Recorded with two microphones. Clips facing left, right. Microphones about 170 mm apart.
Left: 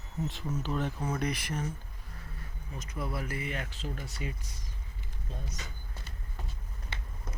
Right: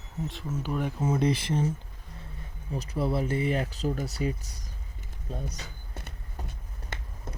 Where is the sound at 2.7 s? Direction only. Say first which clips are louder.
Right 9 dB; 35° right (ahead or behind).